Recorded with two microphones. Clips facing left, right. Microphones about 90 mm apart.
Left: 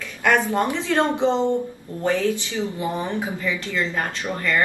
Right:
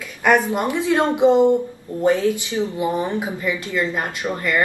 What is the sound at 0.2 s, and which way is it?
Speech, 15° right (ahead or behind).